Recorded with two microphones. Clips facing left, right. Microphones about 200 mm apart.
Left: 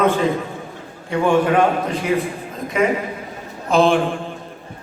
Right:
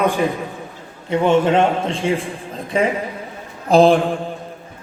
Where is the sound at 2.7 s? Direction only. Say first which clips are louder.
Even; 30° right (ahead or behind).